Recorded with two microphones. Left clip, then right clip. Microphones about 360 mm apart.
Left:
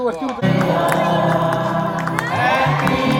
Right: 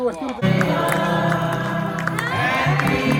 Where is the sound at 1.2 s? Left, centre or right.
Left.